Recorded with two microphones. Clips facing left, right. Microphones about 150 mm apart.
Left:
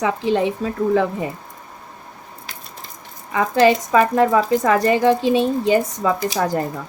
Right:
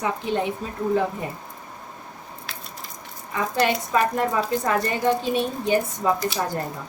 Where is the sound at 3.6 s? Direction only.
90° left.